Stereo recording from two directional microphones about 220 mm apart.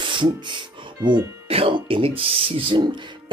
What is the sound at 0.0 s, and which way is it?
Speech, 20° right (ahead or behind).